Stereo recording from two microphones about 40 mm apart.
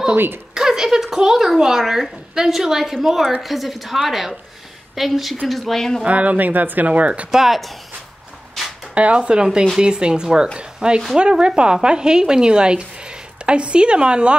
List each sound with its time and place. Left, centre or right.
0.1 s a woman's voice: right
0.6 s a child's voice: centre
6.0 s speech: right
6.9 s speech: right
7.2 s a woman's voice: centre
8.9 s a woman's voice: right